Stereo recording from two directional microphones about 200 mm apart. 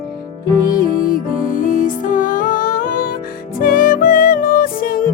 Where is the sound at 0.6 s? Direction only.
45° left (ahead or behind).